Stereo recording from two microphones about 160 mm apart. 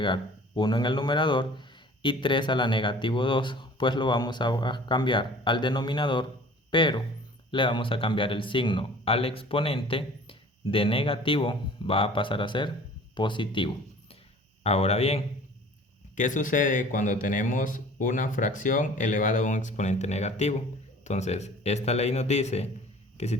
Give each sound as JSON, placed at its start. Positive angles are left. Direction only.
{"t": 0.0, "sound": "speech", "side_deg": 30}
{"t": 14.6, "sound": "speech", "side_deg": 40}
{"t": 16.1, "sound": "a man's voice", "side_deg": 55}